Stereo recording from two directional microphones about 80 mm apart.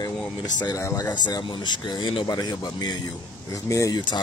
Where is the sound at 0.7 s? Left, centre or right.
Left.